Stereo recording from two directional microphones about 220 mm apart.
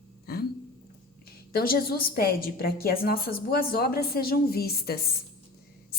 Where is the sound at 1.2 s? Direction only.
45° left (ahead or behind).